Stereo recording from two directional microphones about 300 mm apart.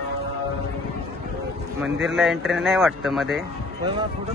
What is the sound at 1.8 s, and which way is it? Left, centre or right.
Speech, centre.